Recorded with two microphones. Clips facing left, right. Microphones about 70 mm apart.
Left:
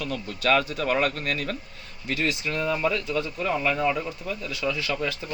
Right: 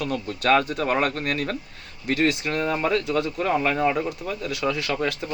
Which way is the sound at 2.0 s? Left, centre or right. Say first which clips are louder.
Right 5 dB; right.